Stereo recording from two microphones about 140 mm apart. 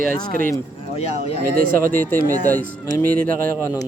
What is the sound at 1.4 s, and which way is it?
Speech, 90° right.